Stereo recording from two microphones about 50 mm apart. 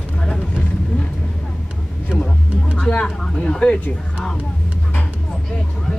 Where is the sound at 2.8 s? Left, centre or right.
Left.